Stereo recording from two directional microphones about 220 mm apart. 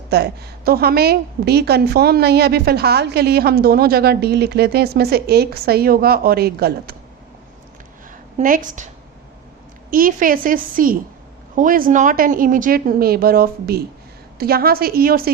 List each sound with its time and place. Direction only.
0.1 s a woman's voice: 45° right (ahead or behind)
8.4 s speech: 35° right (ahead or behind)
9.9 s a woman's voice: 40° right (ahead or behind)